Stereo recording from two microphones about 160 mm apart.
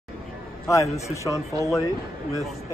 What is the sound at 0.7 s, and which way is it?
Speech, 20° left (ahead or behind).